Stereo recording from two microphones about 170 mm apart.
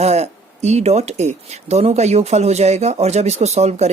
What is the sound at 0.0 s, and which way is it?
Speech, 40° right (ahead or behind).